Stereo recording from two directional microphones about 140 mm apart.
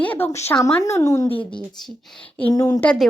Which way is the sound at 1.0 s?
20° left (ahead or behind).